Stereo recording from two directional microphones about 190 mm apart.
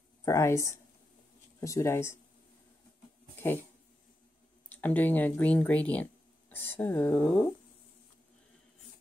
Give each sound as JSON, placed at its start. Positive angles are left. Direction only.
{"t": 0.2, "sound": "speech", "side_deg": 15}
{"t": 4.6, "sound": "speech", "side_deg": 10}